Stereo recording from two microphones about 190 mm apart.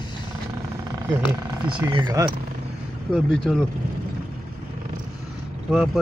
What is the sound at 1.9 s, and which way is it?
Speech, 25° right (ahead or behind).